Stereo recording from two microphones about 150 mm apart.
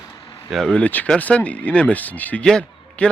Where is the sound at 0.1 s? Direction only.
25° left (ahead or behind).